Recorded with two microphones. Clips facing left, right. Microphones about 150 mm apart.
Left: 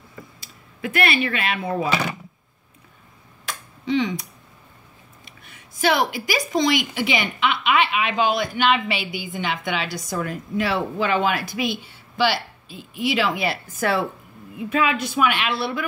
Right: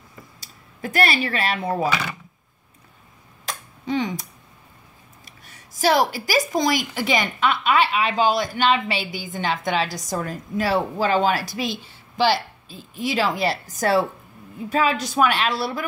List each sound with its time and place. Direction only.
0.7 s a woman's voice: 40° right (ahead or behind)
3.4 s a sound: 45° right (ahead or behind)
5.5 s a woman's voice: 40° right (ahead or behind)